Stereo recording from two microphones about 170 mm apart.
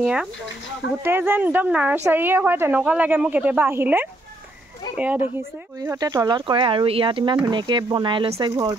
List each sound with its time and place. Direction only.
0.0 s a woman's voice: 5° right (ahead or behind)
5.8 s speech: 20° right (ahead or behind)